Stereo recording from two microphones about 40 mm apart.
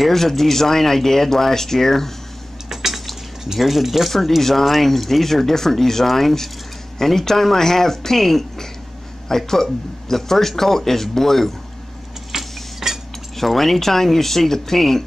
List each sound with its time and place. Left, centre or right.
0.0 s speech: centre
2.7 s cutlery: centre
3.5 s speech: centre
12.3 s a sound: centre
13.4 s speech: centre